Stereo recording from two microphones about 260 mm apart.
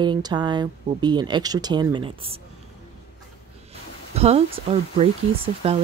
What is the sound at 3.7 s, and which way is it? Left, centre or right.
Speech, right.